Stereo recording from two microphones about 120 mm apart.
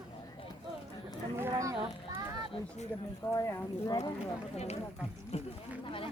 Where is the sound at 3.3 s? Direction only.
25° left (ahead or behind).